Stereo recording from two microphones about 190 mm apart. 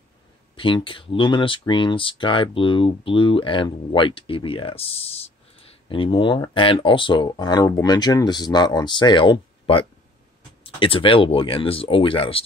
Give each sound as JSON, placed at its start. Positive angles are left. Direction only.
{"t": 0.6, "sound": "speech", "side_deg": 25}